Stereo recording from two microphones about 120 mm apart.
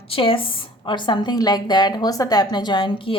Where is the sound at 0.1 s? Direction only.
50° left (ahead or behind).